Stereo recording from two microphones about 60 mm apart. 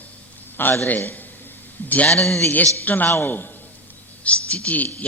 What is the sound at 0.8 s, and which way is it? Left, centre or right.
A man's voice, left.